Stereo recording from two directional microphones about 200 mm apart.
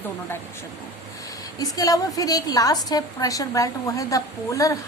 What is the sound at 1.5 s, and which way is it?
A woman's voice, 15° left (ahead or behind).